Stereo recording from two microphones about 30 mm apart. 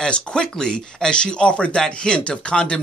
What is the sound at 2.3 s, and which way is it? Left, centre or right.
Speech, left.